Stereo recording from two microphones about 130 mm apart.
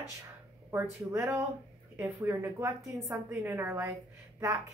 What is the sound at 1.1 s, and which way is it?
A woman's voice, 20° right (ahead or behind).